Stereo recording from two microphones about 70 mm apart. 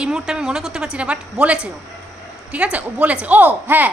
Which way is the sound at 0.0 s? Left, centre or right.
Centre.